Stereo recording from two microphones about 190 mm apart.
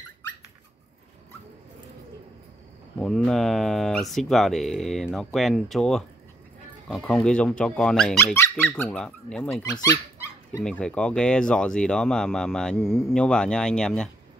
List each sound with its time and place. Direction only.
3.0 s speech: centre (ahead or behind)
9.6 s speech: 20° left (ahead or behind)
10.6 s speech: 5° left (ahead or behind)